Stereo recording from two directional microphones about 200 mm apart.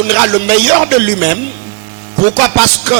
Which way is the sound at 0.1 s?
10° right (ahead or behind).